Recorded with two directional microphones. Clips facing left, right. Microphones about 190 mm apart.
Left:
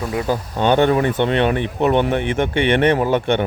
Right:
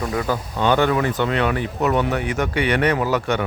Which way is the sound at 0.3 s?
20° left (ahead or behind).